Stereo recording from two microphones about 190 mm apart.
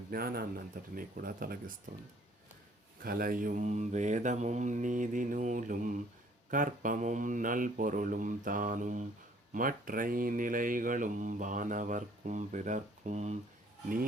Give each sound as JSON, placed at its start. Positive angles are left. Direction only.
{"t": 0.1, "sound": "speech", "side_deg": -50}
{"t": 3.0, "sound": "speech", "side_deg": -50}